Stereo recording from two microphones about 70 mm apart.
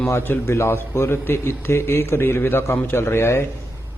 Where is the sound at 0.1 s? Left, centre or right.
Left.